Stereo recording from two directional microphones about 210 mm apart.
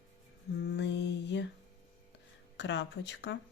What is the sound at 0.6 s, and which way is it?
Speech, 55° left (ahead or behind).